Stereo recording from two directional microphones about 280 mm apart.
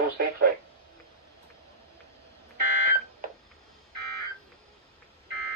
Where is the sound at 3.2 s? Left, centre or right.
Right.